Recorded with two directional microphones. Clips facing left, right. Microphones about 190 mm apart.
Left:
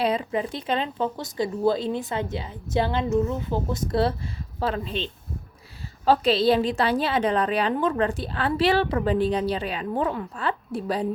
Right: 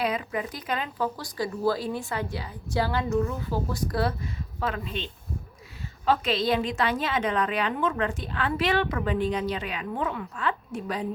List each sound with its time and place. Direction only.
0.0 s a woman's voice: 30° left (ahead or behind)